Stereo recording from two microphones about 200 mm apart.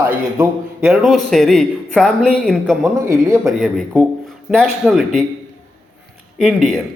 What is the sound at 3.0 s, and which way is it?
Speech, 15° right (ahead or behind).